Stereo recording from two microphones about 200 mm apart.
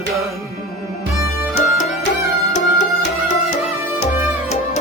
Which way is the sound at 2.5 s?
35° left (ahead or behind).